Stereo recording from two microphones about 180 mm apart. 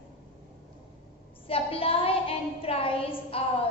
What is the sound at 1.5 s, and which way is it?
A woman's voice, 30° left (ahead or behind).